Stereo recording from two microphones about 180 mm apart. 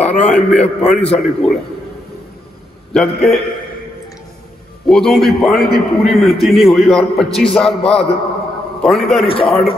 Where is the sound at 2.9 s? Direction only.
Centre (ahead or behind).